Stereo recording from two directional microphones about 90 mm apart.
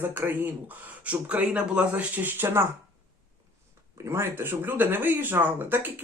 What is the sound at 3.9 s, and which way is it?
Speech, 30° right (ahead or behind).